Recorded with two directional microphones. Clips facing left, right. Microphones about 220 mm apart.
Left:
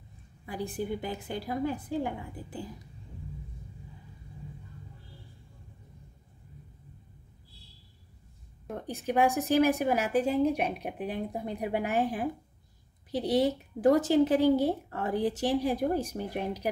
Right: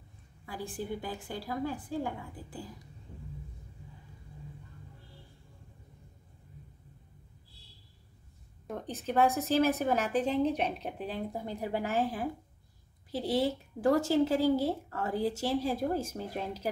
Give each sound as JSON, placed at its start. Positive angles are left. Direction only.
{"t": 0.5, "sound": "a woman's voice", "side_deg": 20}
{"t": 8.6, "sound": "a woman's voice", "side_deg": 10}